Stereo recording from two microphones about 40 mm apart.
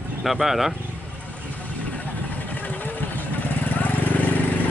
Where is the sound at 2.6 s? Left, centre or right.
Left.